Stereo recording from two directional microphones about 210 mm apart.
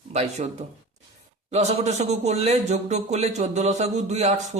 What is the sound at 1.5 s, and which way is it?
Speech, 30° right (ahead or behind).